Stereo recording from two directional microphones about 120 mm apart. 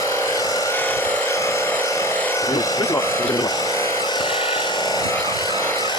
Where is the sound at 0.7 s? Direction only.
20° left (ahead or behind).